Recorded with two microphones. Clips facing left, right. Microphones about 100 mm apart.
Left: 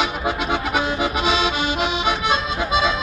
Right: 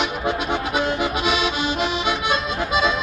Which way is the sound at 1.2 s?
25° left (ahead or behind).